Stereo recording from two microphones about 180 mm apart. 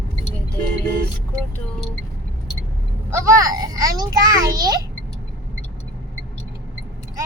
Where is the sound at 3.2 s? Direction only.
15° right (ahead or behind).